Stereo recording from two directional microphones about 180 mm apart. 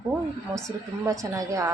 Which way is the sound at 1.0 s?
20° right (ahead or behind).